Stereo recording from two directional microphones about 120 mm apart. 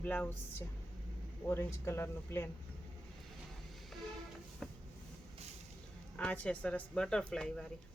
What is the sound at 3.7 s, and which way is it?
Music, centre (ahead or behind).